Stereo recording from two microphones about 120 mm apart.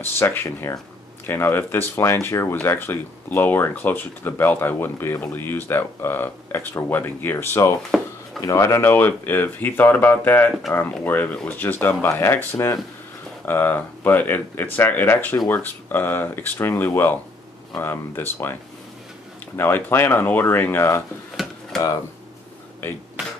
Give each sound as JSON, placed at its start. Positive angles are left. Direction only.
{"t": 0.0, "sound": "speech", "side_deg": 20}
{"t": 7.9, "sound": "a sound", "side_deg": -5}
{"t": 8.4, "sound": "speech", "side_deg": 25}
{"t": 13.5, "sound": "speech", "side_deg": 15}